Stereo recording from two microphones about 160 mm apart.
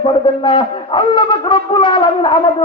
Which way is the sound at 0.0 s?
30° left (ahead or behind).